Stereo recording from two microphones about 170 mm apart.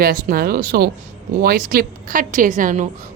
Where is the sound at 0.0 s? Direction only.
55° right (ahead or behind).